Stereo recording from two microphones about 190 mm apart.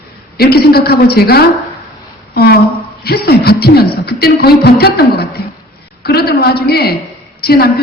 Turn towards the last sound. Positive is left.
turn(degrees=55)  # may be behind; listen again after turning